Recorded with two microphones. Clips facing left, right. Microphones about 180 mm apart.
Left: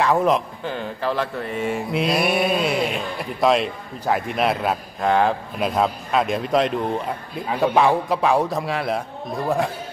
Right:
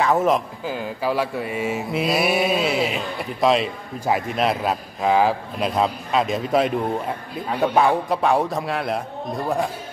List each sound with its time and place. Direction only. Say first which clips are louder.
0.0 s speech: even; centre (ahead or behind)